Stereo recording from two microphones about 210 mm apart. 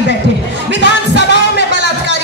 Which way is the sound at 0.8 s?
55° left (ahead or behind).